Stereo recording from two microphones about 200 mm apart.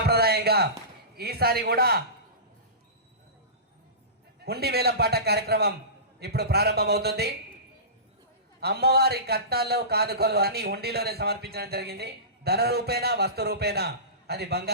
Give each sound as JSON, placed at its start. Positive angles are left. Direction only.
{"t": 0.1, "sound": "a sound", "side_deg": -50}
{"t": 1.1, "sound": "speech", "side_deg": -50}
{"t": 4.4, "sound": "speech", "side_deg": -50}
{"t": 8.6, "sound": "speech", "side_deg": -55}